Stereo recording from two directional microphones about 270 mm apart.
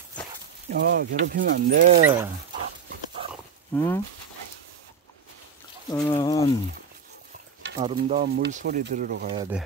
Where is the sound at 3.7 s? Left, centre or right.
Centre.